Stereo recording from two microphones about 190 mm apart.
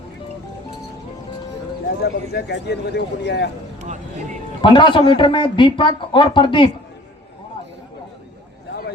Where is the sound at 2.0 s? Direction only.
60° left (ahead or behind).